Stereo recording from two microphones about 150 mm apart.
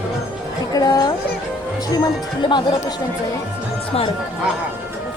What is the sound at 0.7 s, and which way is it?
Speech, 25° left (ahead or behind).